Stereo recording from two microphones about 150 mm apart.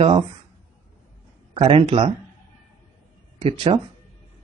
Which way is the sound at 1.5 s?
40° right (ahead or behind).